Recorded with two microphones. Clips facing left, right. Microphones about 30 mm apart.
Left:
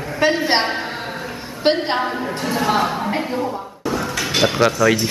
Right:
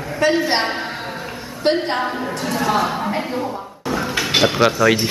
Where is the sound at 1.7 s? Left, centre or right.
Centre.